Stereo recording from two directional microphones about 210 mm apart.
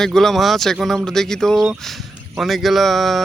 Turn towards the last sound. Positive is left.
turn(degrees=0)  # may be behind; listen again after turning